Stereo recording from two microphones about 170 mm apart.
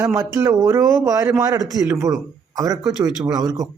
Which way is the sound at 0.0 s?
15° right (ahead or behind).